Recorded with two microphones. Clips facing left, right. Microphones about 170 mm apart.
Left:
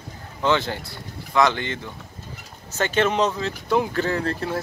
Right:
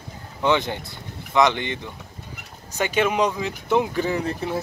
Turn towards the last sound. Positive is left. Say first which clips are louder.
# even
turn(degrees=-15)  # may be behind; listen again after turning